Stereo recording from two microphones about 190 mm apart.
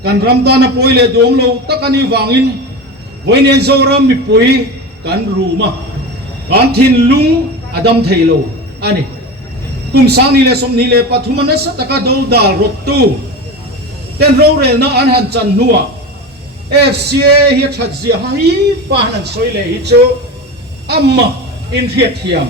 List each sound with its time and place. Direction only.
0.0 s a man's voice: 55° right (ahead or behind)
9.9 s a man's voice: 60° right (ahead or behind)
14.2 s a man's voice: 60° right (ahead or behind)
16.8 s a man's voice: 60° right (ahead or behind)
20.8 s a woman's voice: 60° right (ahead or behind)